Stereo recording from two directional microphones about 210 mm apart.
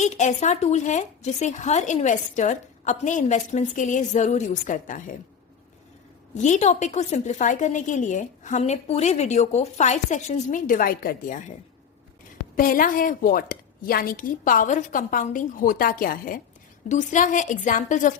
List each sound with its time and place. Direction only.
0.0 s a woman's voice: 35° left (ahead or behind)
6.3 s a woman's voice: 35° left (ahead or behind)
12.5 s a woman's voice: 40° left (ahead or behind)